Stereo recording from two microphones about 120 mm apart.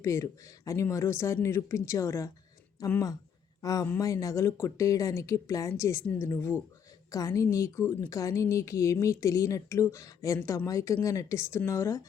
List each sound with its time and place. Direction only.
0.0 s speech: 25° left (ahead or behind)